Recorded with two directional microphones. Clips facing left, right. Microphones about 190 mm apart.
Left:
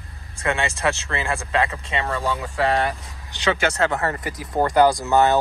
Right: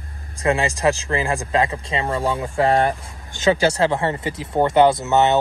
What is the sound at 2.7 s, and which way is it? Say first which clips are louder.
Speech: right 4 dB; 45° right (ahead or behind).